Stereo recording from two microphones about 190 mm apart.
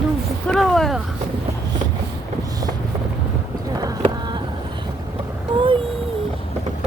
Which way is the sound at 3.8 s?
25° right (ahead or behind).